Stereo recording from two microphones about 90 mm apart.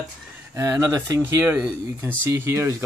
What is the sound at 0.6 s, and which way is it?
Speech, 30° right (ahead or behind).